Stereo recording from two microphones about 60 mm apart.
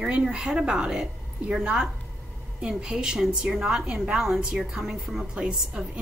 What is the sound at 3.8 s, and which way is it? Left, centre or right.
Speech, centre.